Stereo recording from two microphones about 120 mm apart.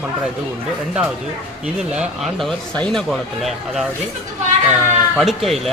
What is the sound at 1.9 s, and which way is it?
Speech, 10° right (ahead or behind).